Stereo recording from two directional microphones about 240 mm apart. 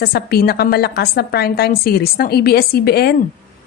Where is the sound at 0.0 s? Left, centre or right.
Left.